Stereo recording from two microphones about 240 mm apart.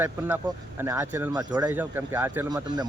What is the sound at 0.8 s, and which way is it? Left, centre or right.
Speech, centre.